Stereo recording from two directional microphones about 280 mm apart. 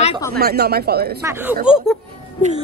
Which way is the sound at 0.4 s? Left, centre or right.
Right.